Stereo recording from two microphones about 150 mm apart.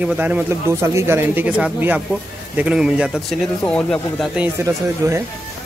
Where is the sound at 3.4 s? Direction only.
5° left (ahead or behind).